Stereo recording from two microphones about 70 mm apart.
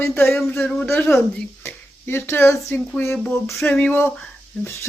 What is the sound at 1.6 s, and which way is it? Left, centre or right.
Speech, left.